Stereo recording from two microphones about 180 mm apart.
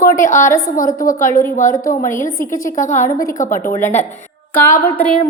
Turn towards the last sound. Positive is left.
turn(degrees=10)  # may be behind; listen again after turning